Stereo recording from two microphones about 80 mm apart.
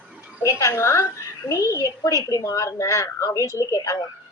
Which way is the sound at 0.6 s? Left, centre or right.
Left.